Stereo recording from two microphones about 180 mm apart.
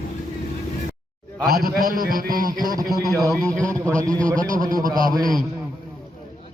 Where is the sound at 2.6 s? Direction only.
20° right (ahead or behind).